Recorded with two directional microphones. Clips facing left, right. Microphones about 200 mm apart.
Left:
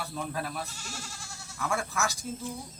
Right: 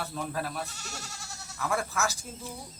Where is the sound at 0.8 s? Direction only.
40° right (ahead or behind).